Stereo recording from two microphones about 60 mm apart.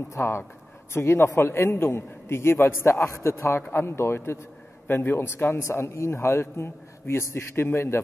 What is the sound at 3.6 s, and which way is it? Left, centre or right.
A man's voice, left.